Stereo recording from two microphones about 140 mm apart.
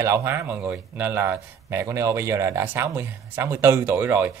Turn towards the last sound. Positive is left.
turn(degrees=-15)  # may be behind; listen again after turning